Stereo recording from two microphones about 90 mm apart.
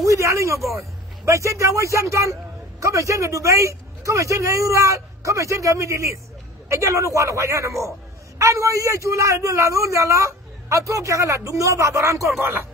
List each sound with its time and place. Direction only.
0.0 s a man's voice: 35° right (ahead or behind)